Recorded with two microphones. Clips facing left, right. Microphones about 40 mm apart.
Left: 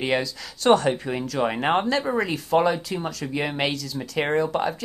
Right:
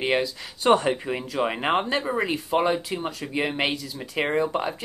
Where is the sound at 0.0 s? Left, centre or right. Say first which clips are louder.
Even; centre.